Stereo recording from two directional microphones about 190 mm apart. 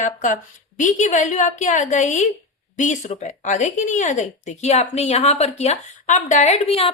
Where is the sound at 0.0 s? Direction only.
40° left (ahead or behind).